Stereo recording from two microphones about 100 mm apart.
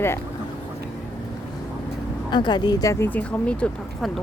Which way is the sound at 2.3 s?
45° left (ahead or behind).